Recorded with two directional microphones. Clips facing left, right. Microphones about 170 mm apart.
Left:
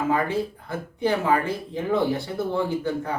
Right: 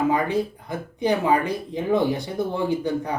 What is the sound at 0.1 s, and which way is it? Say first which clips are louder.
Speech: right 1 dB; 15° right (ahead or behind).